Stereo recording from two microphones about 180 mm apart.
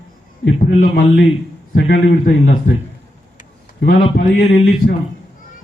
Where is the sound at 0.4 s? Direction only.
50° left (ahead or behind).